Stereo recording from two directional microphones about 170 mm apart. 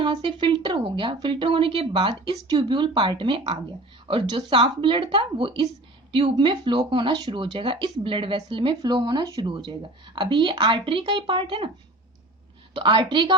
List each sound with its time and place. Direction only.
0.0 s speech: 30° right (ahead or behind)
12.7 s speech: 30° right (ahead or behind)